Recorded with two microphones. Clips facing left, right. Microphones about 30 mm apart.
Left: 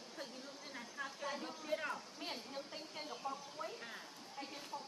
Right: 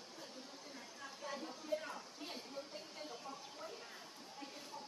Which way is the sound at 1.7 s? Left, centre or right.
Left.